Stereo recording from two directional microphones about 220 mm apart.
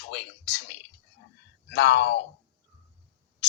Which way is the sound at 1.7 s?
50° left (ahead or behind).